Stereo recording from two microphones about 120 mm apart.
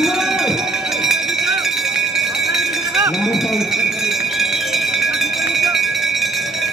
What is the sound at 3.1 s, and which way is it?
Cowbell, centre (ahead or behind).